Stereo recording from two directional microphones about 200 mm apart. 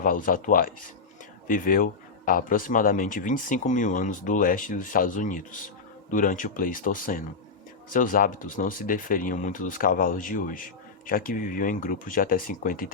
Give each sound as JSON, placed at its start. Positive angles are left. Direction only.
{"t": 0.0, "sound": "speech", "side_deg": 45}